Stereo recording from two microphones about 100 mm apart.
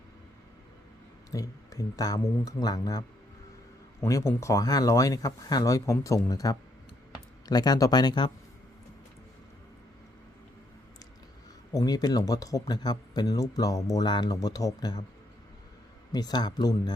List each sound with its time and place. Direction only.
1.3 s speech: 35° left (ahead or behind)
4.0 s speech: 25° left (ahead or behind); by 8.3 s 50° left (ahead or behind)
11.7 s speech: 40° left (ahead or behind)
16.1 s speech: 45° left (ahead or behind)